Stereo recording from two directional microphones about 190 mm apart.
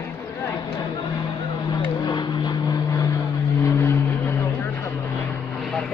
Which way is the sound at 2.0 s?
20° left (ahead or behind).